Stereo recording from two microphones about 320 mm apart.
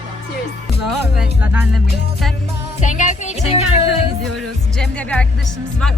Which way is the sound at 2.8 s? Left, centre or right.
Left.